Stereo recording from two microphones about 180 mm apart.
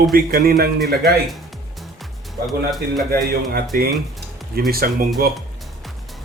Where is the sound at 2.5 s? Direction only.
Centre (ahead or behind).